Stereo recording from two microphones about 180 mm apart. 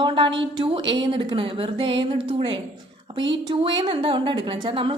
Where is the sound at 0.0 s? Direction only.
25° right (ahead or behind).